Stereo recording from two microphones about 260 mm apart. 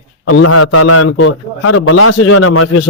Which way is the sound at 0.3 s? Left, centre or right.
Left.